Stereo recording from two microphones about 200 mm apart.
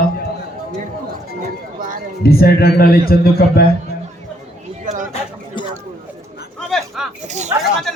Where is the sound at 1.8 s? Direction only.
40° right (ahead or behind).